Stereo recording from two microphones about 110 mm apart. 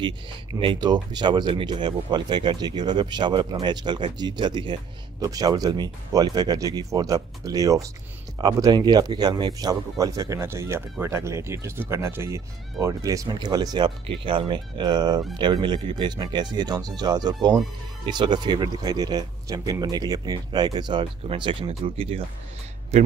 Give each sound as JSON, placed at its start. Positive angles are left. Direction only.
{"t": 0.6, "sound": "speech", "side_deg": -45}